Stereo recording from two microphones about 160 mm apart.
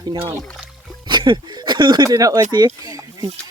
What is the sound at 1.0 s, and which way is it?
Speech, 30° right (ahead or behind).